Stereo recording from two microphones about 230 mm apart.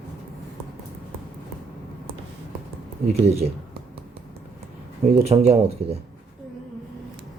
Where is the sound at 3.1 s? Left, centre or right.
Right.